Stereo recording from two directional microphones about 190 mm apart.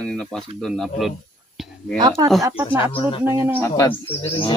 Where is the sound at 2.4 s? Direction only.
10° right (ahead or behind).